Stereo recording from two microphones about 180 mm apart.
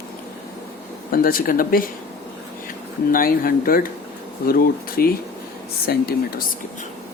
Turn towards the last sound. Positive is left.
turn(degrees=55)  # may be behind; listen again after turning